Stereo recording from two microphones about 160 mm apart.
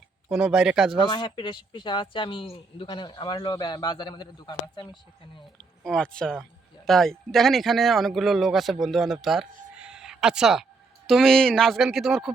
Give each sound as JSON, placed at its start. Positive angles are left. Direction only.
{"t": 0.3, "sound": "a man's voice", "side_deg": -5}
{"t": 1.0, "sound": "speech", "side_deg": 25}
{"t": 5.5, "sound": "a man's voice", "side_deg": 5}
{"t": 9.7, "sound": "a sound", "side_deg": -5}
{"t": 11.1, "sound": "a man's voice", "side_deg": 5}